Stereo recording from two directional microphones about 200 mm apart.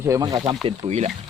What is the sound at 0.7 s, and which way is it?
Speech, 30° right (ahead or behind).